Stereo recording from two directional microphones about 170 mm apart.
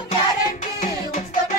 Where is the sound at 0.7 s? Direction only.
45° left (ahead or behind).